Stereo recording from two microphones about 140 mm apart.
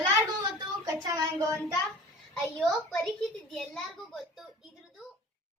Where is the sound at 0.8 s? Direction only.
30° right (ahead or behind).